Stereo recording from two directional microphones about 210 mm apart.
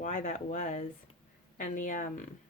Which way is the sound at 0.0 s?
35° left (ahead or behind).